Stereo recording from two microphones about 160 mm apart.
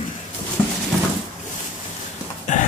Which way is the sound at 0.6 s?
15° left (ahead or behind).